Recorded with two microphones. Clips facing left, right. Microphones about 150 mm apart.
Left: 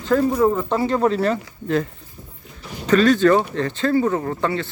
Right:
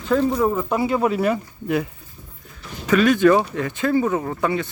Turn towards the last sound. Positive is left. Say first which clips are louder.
# even
turn(degrees=-15)  # may be behind; listen again after turning